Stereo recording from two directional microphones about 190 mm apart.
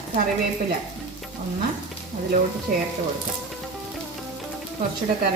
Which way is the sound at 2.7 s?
50° right (ahead or behind).